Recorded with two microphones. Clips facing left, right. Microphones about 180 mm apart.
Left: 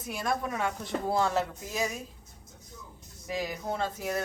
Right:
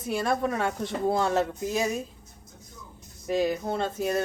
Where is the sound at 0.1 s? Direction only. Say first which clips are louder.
Right 5 dB; 30° right (ahead or behind).